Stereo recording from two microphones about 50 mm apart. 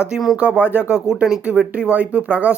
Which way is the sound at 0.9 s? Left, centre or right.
Centre.